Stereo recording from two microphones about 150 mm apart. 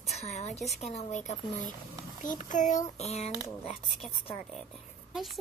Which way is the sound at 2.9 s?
45° left (ahead or behind).